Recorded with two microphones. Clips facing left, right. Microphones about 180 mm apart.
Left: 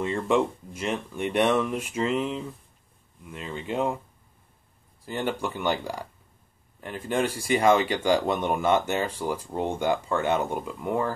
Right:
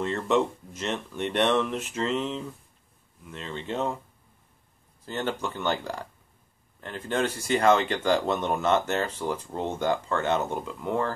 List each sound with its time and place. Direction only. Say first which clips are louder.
0.0 s speech: left 1 dB; 10° left (ahead or behind)
5.0 s speech: left 1 dB; 10° left (ahead or behind)